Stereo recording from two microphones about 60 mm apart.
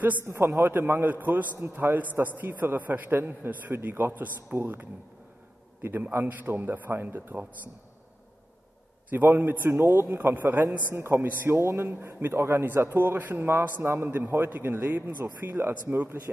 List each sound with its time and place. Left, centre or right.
0.3 s a man's voice: right
9.1 s a man's voice: right